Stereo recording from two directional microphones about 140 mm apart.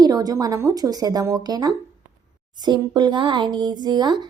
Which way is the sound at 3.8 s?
30° right (ahead or behind).